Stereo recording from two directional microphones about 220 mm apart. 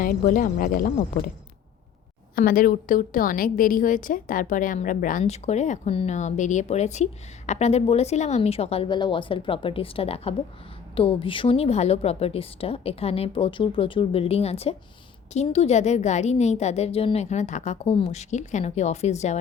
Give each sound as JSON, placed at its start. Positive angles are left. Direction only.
{"t": 0.0, "sound": "a woman's voice", "side_deg": 40}
{"t": 2.3, "sound": "a woman's voice", "side_deg": 40}